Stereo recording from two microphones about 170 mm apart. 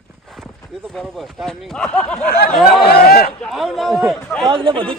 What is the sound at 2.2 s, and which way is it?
Speech, 75° left (ahead or behind).